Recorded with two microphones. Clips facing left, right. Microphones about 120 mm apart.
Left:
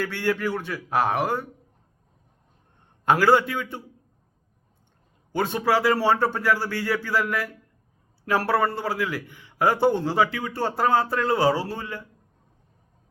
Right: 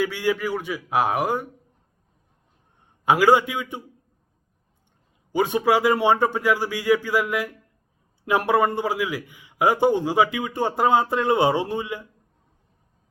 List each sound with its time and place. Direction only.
0.0 s a man's voice: 10° right (ahead or behind)
3.0 s a man's voice: 10° right (ahead or behind)
5.3 s a man's voice: 10° right (ahead or behind)